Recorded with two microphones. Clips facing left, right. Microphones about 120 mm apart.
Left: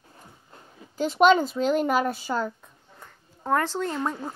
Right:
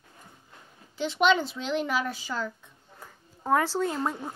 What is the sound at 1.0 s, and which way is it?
Speech, 45° left (ahead or behind).